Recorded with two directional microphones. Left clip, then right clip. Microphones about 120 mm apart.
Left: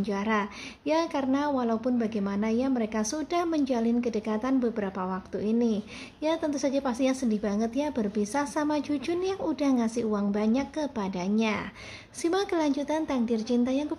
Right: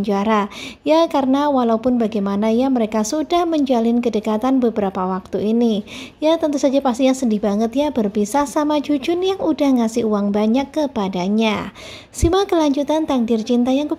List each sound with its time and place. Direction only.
0.0 s a woman's voice: 40° right (ahead or behind)